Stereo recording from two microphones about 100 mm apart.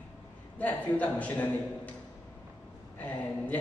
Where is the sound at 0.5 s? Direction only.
15° left (ahead or behind).